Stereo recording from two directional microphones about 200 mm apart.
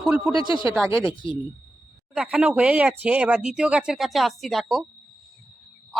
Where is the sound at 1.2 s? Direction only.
25° left (ahead or behind).